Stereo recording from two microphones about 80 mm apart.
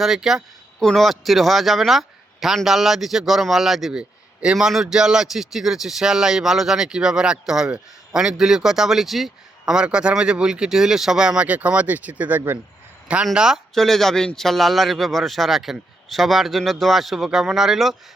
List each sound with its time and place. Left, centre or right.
0.0 s a man's voice: centre; by 12.5 s right
13.3 s speech: centre
13.7 s a man's voice: centre